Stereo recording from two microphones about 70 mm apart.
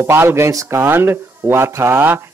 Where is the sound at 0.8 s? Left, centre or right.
Right.